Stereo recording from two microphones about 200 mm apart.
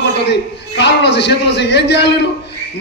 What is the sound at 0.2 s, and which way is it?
A man's voice, 60° left (ahead or behind).